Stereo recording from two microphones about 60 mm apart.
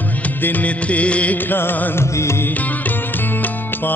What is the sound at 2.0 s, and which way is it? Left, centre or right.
Music, left.